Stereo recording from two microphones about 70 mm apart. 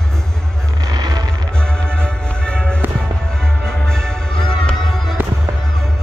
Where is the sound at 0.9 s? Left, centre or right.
Right.